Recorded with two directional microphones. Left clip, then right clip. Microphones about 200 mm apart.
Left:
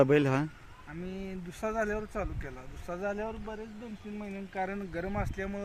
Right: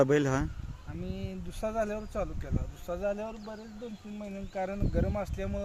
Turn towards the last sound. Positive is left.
turn(degrees=-40)  # may be behind; listen again after turning